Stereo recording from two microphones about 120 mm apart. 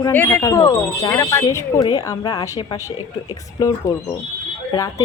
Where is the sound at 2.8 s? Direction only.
20° right (ahead or behind).